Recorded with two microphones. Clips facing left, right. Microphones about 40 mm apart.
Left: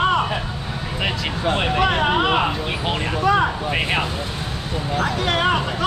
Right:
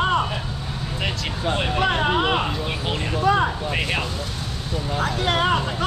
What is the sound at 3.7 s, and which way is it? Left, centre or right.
Speech, left.